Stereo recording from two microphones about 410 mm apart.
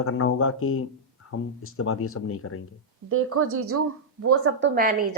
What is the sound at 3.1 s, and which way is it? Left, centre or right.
A woman's voice, right.